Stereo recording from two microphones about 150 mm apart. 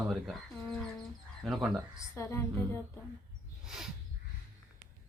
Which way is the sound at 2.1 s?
15° left (ahead or behind).